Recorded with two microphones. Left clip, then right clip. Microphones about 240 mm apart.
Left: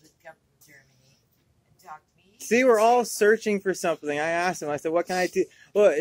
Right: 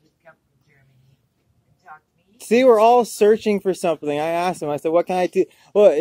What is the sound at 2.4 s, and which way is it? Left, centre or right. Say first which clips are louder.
Speech: right 6 dB; right.